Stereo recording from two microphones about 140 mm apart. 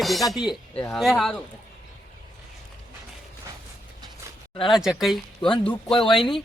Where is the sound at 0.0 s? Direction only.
Centre (ahead or behind).